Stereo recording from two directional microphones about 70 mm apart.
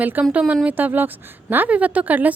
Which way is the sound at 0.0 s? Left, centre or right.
Right.